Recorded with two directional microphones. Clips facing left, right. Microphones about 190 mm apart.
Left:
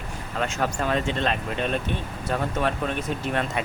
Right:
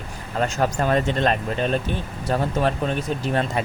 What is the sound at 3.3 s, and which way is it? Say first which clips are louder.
Speech: right 4 dB; 35° right (ahead or behind).